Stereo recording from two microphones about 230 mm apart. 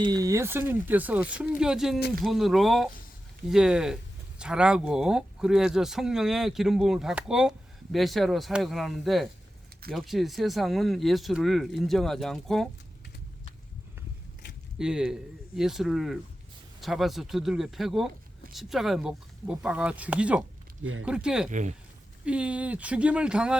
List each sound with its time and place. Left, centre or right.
0.0 s speech: centre
14.8 s speech: centre
21.5 s speech: right
22.2 s speech: centre